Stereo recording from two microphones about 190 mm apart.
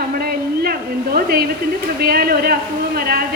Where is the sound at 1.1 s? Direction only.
55° right (ahead or behind).